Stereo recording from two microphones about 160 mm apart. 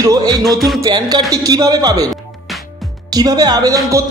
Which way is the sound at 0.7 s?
25° right (ahead or behind).